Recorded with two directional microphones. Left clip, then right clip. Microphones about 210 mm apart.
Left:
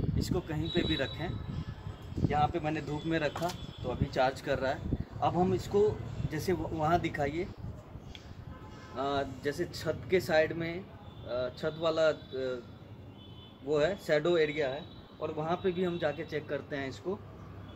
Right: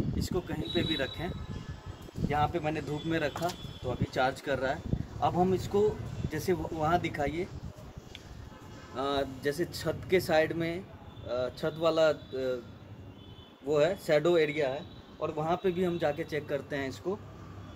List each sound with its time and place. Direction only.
0.2 s speech: centre (ahead or behind)
8.9 s a man's voice: 50° right (ahead or behind); by 12.5 s 35° right (ahead or behind)
13.7 s a man's voice: 35° right (ahead or behind)